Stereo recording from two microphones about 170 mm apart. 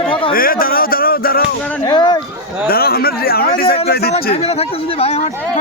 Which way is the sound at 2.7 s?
65° left (ahead or behind).